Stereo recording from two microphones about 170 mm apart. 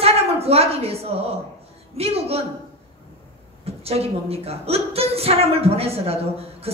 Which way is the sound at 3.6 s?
35° right (ahead or behind).